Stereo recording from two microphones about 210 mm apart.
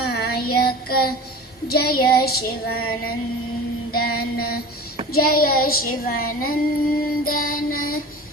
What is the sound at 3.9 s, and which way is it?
Music, 45° left (ahead or behind).